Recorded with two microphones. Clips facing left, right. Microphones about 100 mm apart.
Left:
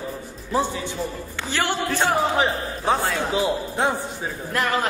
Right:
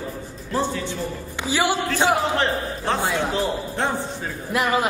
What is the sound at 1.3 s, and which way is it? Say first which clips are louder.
Speech: right 4 dB; 10° right (ahead or behind).